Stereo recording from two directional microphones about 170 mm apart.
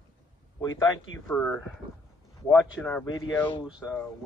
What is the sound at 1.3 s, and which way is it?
Speech, 5° left (ahead or behind).